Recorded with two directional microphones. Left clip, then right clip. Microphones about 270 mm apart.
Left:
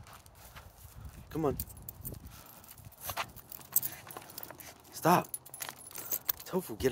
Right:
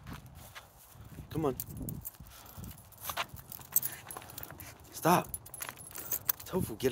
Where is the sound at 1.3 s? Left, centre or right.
Centre.